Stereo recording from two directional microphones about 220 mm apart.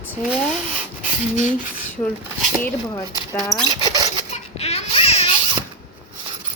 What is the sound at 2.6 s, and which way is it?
Speech, 15° left (ahead or behind).